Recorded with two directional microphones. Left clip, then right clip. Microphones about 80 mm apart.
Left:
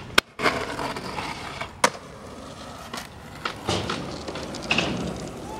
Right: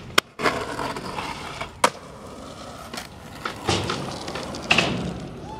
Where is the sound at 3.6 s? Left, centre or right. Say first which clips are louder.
Right 4 dB; centre.